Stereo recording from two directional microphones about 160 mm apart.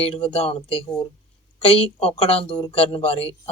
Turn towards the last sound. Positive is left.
turn(degrees=40)  # may be behind; listen again after turning